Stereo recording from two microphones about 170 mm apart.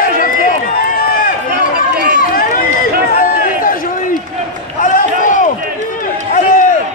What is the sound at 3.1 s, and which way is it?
Run, 55° left (ahead or behind).